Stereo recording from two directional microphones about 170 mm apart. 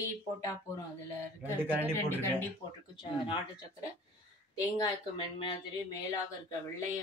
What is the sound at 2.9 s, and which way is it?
Speech, 25° left (ahead or behind).